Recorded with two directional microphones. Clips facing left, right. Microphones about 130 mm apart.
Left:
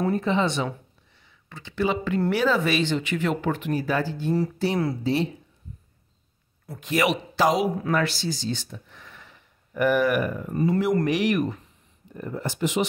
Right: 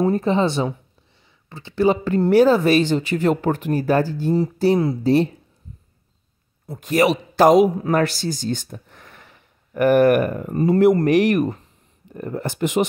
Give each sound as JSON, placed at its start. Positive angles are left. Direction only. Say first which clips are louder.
{"t": 0.1, "sound": "speech", "louder": "right 4 dB", "side_deg": -35}
{"t": 6.8, "sound": "speech", "louder": "right 6 dB", "side_deg": -40}
{"t": 10.5, "sound": "speech", "louder": "right 8 dB", "side_deg": -45}
{"t": 12.1, "sound": "speech", "louder": "right 4 dB", "side_deg": -60}